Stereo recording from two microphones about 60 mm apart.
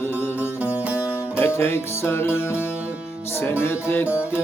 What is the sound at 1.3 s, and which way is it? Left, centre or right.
Music, left.